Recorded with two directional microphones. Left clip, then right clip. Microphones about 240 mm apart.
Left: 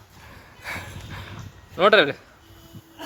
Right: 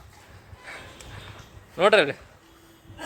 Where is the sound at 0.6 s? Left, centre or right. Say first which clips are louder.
Left 8 dB; left.